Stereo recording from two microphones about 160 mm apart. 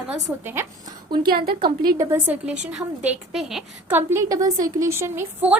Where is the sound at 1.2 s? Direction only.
70° right (ahead or behind).